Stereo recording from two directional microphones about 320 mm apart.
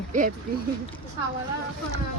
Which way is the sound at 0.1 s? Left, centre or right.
Right.